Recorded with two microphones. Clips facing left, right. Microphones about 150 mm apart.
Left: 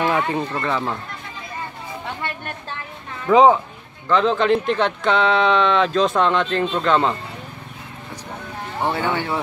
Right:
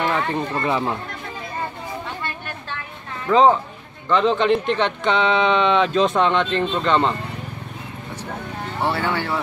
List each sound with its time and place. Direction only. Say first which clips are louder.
0.0 s a sound: left 2 dB; 10° left (ahead or behind)
0.6 s speech: right 1 dB; 15° right (ahead or behind)
3.3 s speech: left 2 dB; 10° left (ahead or behind)
8.8 s speech: left 1 dB; 20° left (ahead or behind)